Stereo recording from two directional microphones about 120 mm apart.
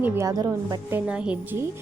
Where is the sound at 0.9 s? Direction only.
15° right (ahead or behind).